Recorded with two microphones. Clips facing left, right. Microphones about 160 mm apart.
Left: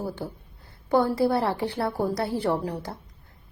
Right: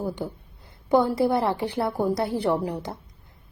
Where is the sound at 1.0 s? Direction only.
20° right (ahead or behind).